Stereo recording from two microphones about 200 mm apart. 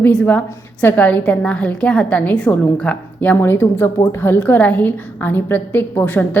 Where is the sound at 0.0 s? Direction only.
5° left (ahead or behind).